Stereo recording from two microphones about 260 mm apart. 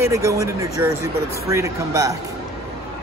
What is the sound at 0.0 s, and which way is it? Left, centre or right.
Speech, centre.